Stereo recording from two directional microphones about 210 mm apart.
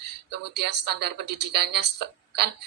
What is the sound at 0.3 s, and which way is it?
A woman's voice, 50° right (ahead or behind).